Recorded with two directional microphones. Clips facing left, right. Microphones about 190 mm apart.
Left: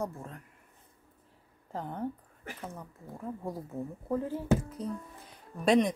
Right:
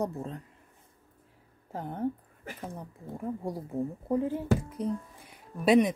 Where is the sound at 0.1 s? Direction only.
25° right (ahead or behind).